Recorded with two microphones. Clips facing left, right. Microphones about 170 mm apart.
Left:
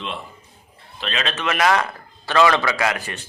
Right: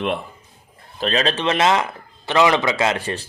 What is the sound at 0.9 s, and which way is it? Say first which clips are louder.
A man's voice: right 6 dB; 40° right (ahead or behind).